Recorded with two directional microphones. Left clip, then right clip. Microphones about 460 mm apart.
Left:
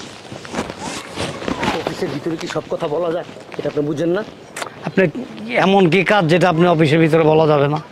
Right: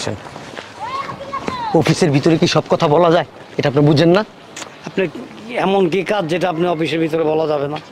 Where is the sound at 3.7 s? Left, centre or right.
Right.